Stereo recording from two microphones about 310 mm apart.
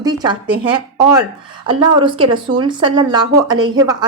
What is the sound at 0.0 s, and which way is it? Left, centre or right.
A woman's voice, centre.